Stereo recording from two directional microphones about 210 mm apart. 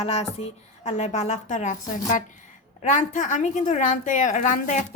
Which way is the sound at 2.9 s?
35° left (ahead or behind).